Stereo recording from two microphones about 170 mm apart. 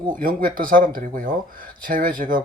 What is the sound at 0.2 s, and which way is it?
Speech, 55° right (ahead or behind).